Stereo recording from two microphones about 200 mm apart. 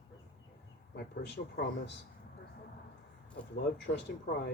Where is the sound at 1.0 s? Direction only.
55° left (ahead or behind).